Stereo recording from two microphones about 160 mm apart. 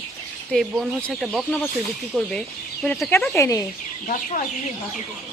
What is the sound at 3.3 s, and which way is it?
Speech, 20° left (ahead or behind).